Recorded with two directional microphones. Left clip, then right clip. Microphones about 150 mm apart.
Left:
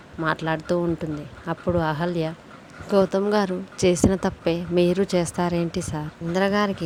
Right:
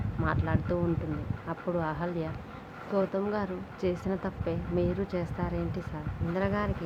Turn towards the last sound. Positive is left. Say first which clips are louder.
# left 9 dB
turn(degrees=60)  # may be behind; listen again after turning